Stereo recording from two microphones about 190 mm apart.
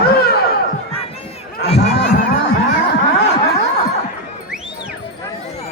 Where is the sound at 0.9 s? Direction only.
30° left (ahead or behind).